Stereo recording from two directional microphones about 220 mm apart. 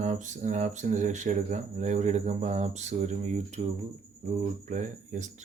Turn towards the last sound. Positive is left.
turn(degrees=-35)  # may be behind; listen again after turning